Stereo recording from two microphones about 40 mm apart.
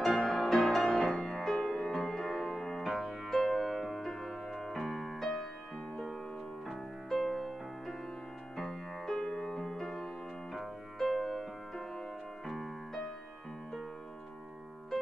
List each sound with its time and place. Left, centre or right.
0.0 s music: centre
7.1 s music: centre
11.0 s music: centre